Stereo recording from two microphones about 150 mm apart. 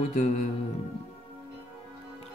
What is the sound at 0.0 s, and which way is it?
Music, 50° left (ahead or behind).